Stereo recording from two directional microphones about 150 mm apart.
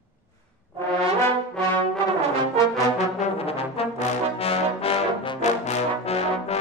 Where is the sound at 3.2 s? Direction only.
40° left (ahead or behind).